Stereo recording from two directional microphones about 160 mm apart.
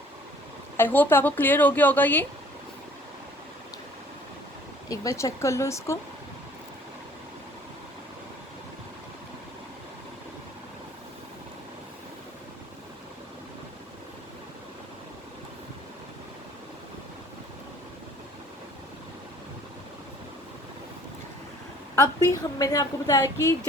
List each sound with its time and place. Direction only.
0.8 s a woman's voice: 10° left (ahead or behind)
4.9 s a woman's voice: 20° left (ahead or behind)
21.9 s a woman's voice: 20° left (ahead or behind)